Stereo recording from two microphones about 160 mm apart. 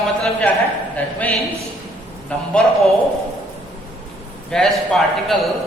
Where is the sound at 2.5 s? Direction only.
Centre (ahead or behind).